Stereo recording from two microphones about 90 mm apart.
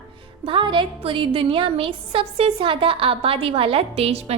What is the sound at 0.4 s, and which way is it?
A woman's voice, 65° right (ahead or behind).